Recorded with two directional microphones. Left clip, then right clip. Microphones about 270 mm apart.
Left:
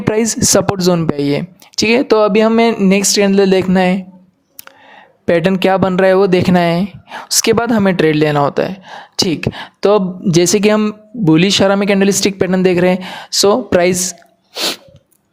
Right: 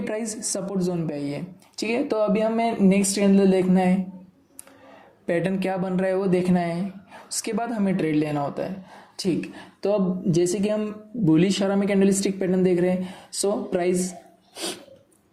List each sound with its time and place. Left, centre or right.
0.0 s speech: left
5.2 s speech: left
14.5 s sneeze: left